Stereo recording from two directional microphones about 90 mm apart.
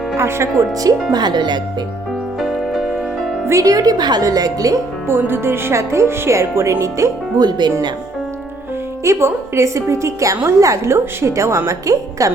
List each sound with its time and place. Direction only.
0.2 s a woman's voice: 30° right (ahead or behind)
1.1 s speech: 50° right (ahead or behind)
3.4 s a woman's voice: 35° right (ahead or behind)
5.0 s a woman's voice: 25° right (ahead or behind)
7.3 s speech: 50° right (ahead or behind)
9.0 s a woman's voice: 30° right (ahead or behind)